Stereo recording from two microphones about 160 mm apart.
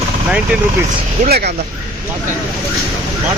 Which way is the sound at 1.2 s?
85° right.